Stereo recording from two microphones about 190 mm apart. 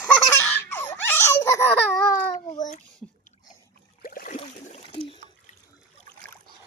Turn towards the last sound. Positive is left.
turn(degrees=30)  # may be behind; listen again after turning